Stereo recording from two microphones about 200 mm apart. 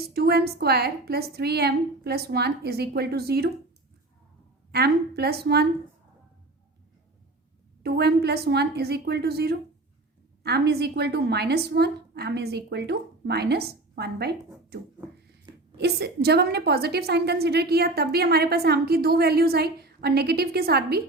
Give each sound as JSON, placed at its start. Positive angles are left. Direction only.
{"t": 0.1, "sound": "a woman's voice", "side_deg": -50}
{"t": 4.7, "sound": "a woman's voice", "side_deg": -55}
{"t": 7.8, "sound": "a woman's voice", "side_deg": -55}
{"t": 15.5, "sound": "a sound", "side_deg": -20}
{"t": 15.8, "sound": "a woman's voice", "side_deg": -55}